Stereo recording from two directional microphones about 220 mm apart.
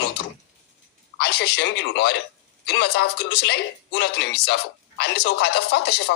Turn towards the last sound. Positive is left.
turn(degrees=50)  # may be behind; listen again after turning